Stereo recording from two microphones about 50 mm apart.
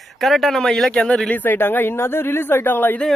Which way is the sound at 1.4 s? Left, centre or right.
Left.